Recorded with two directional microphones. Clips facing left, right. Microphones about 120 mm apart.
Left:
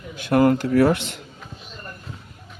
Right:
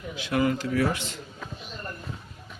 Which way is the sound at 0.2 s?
55° left (ahead or behind).